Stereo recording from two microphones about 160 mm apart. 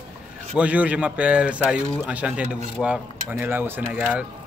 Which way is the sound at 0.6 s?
10° right (ahead or behind).